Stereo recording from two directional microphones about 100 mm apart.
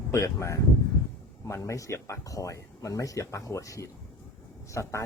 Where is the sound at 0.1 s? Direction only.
30° left (ahead or behind).